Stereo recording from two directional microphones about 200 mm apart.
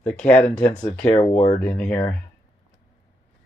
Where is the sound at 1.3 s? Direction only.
30° left (ahead or behind).